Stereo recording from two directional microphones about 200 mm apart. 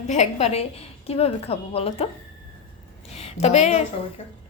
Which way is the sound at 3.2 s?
30° left (ahead or behind).